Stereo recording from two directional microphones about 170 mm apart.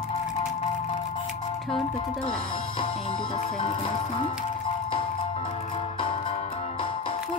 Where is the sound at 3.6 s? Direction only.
30° left (ahead or behind).